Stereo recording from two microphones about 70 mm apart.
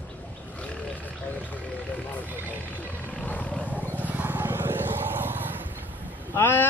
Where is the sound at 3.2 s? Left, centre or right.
Left.